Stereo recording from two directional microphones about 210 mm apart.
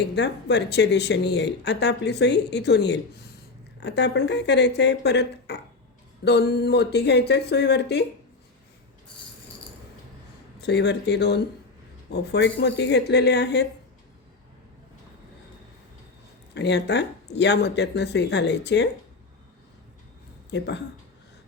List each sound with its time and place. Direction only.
0.2 s speech: 55° left (ahead or behind)
10.6 s speech: 55° left (ahead or behind)
16.6 s speech: 55° left (ahead or behind)
20.5 s speech: 55° left (ahead or behind)